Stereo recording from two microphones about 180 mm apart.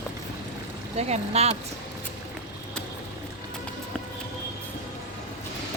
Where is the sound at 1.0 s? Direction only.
35° right (ahead or behind).